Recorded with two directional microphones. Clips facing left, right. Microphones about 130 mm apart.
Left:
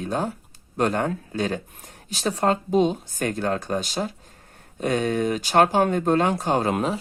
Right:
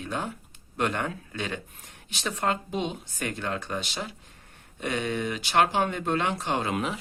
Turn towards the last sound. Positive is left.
turn(degrees=40)  # may be behind; listen again after turning